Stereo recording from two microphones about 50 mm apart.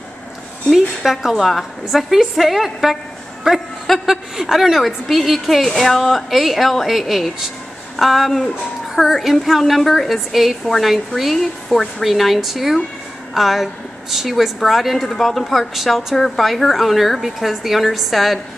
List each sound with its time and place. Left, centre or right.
0.7 s a woman's voice: centre
16.2 s a woman's voice: centre